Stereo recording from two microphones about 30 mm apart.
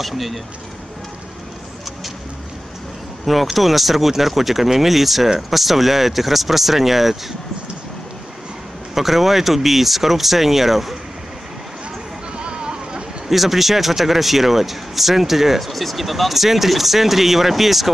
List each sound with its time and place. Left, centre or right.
0.0 s speech: centre
3.3 s speech: centre
8.9 s speech: centre
12.4 s a sound: right
13.3 s speech: centre